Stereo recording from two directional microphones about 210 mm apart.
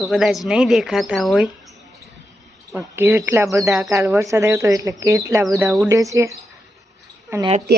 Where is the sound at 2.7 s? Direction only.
10° right (ahead or behind).